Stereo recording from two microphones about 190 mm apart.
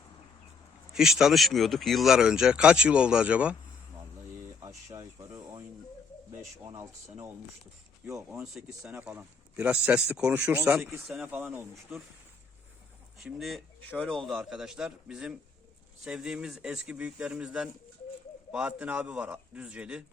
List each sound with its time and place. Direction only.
0.9 s speech: centre (ahead or behind)
4.9 s speech: 15° right (ahead or behind)
6.7 s a man's voice: 15° right (ahead or behind)
8.5 s a man's voice: 5° right (ahead or behind)
13.1 s a man's voice: centre (ahead or behind)